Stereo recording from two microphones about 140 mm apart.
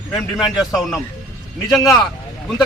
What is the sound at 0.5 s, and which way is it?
Speech, centre (ahead or behind).